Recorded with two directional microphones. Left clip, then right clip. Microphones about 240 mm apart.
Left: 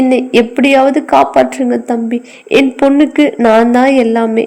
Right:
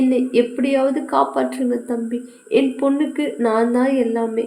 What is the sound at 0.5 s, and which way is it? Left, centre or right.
A woman's voice, left.